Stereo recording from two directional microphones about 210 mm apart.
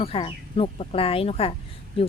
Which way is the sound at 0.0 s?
25° left (ahead or behind).